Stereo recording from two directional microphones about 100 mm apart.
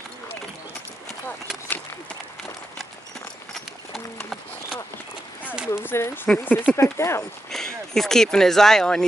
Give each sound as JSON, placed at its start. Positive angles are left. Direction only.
{"t": 3.5, "sound": "clip-clop", "side_deg": 5}
{"t": 5.7, "sound": "speech", "side_deg": 25}
{"t": 6.2, "sound": "speech", "side_deg": 15}
{"t": 6.8, "sound": "speech", "side_deg": 30}
{"t": 7.5, "sound": "speech", "side_deg": 5}